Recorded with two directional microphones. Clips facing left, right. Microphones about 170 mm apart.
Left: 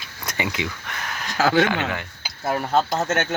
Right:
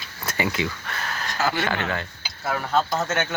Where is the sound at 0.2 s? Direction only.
15° left (ahead or behind).